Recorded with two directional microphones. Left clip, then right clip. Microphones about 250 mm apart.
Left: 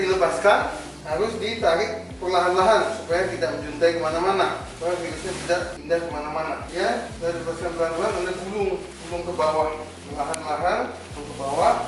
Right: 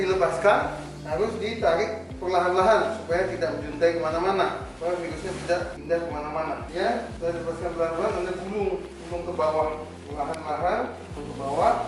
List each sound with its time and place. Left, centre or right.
0.0 s a man's voice: centre
9.4 s a man's voice: centre